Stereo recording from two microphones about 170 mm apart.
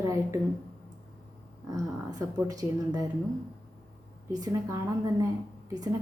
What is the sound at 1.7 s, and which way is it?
A woman's voice, 20° right (ahead or behind).